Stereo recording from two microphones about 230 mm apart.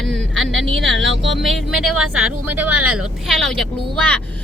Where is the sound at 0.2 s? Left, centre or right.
Right.